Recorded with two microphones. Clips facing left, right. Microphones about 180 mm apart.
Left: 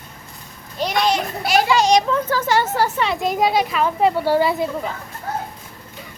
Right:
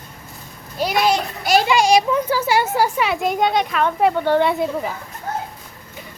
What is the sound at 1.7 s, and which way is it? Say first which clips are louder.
A child's voice: right 1 dB; 10° right (ahead or behind).